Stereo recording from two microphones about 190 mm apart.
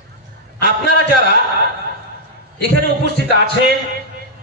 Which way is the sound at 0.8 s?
60° left (ahead or behind).